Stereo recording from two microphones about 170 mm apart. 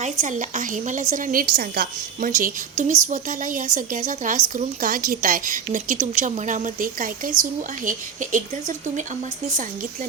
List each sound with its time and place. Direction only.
0.0 s a woman's voice: 45° right (ahead or behind)